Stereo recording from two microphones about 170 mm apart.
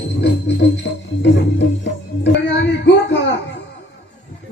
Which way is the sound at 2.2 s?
90° left.